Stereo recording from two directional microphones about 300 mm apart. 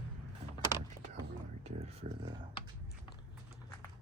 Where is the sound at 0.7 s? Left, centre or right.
Centre.